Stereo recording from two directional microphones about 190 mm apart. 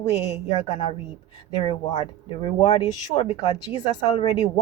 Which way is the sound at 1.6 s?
20° left (ahead or behind).